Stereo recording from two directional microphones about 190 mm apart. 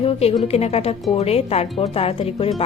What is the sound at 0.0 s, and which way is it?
A woman's voice, 30° left (ahead or behind).